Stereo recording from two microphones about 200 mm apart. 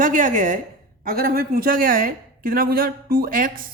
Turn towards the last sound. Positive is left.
turn(degrees=-45)  # may be behind; listen again after turning